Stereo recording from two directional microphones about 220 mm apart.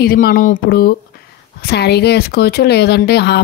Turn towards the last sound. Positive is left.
turn(degrees=50)  # may be behind; listen again after turning